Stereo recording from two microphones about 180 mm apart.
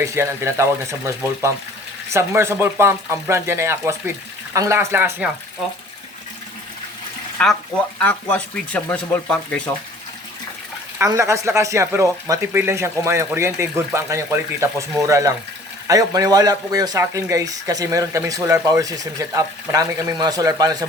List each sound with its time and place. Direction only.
0.0 s speech: 15° right (ahead or behind)
7.4 s speech: 5° left (ahead or behind)
10.9 s speech: 15° right (ahead or behind)